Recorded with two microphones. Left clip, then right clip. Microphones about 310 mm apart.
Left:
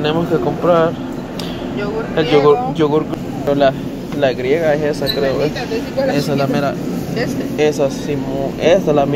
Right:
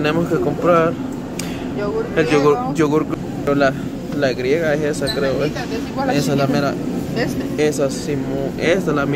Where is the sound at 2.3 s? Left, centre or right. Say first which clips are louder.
Left 5 dB; right.